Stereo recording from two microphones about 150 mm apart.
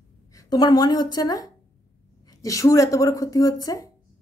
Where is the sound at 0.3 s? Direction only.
25° left (ahead or behind).